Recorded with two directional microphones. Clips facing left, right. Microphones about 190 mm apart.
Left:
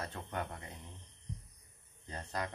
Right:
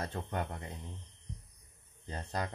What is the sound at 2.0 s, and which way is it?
Speech, 30° right (ahead or behind).